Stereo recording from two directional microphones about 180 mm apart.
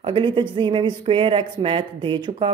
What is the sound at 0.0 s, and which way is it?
Speech, 30° right (ahead or behind).